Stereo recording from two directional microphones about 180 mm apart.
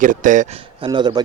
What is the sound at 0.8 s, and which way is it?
Speech, 25° right (ahead or behind).